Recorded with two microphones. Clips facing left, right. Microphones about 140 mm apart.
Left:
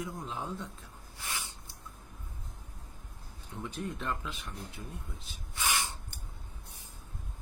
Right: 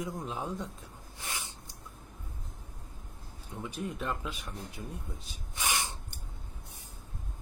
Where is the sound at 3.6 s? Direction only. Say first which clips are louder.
Right 1 dB; 10° right (ahead or behind).